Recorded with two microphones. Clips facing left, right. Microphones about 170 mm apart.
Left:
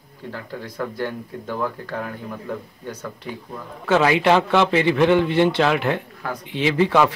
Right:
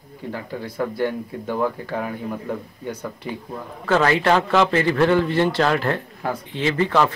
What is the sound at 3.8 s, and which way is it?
A man's voice, 10° left (ahead or behind).